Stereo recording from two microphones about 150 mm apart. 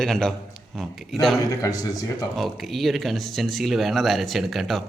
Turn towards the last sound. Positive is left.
turn(degrees=0)  # may be behind; listen again after turning